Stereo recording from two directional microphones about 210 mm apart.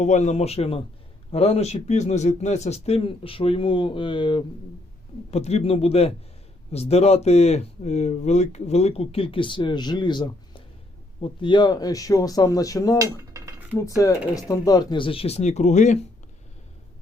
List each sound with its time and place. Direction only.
0.0 s speech: 35° left (ahead or behind); by 13.0 s 15° left (ahead or behind)
13.0 s cutlery: 15° right (ahead or behind)
13.7 s speech: 15° left (ahead or behind); by 16.0 s 35° left (ahead or behind)